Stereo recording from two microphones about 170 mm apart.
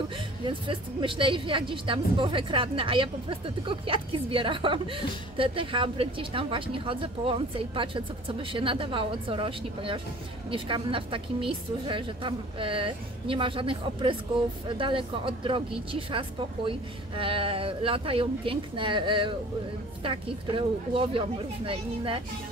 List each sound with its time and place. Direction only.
0.5 s a woman's voice: 30° right (ahead or behind)